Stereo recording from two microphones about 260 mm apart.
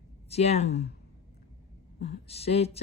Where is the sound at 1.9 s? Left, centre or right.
Left.